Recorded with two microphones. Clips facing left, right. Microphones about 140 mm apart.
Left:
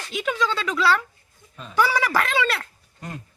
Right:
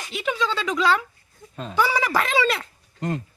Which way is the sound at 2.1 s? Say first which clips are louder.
Right 1 dB; 5° right (ahead or behind).